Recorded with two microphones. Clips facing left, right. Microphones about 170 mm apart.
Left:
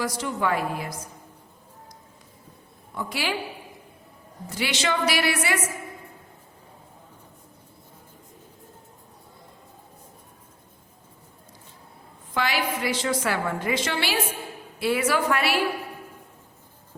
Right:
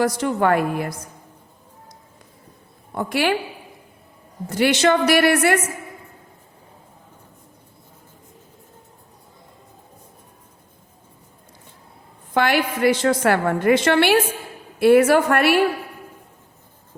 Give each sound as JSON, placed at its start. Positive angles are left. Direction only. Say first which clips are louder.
{"t": 0.0, "sound": "a woman's voice", "louder": "right 8 dB", "side_deg": -60}
{"t": 2.9, "sound": "a woman's voice", "louder": "right 9 dB", "side_deg": -55}
{"t": 4.4, "sound": "a woman's voice", "louder": "right 10 dB", "side_deg": -55}
{"t": 12.3, "sound": "a woman's voice", "louder": "right 7 dB", "side_deg": -55}